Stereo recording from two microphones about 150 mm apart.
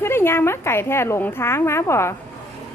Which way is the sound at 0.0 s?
15° left (ahead or behind).